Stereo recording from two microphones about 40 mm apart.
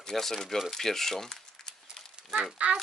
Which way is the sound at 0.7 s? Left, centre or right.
Centre.